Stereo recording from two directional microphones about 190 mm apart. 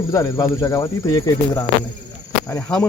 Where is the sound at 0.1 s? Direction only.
15° left (ahead or behind).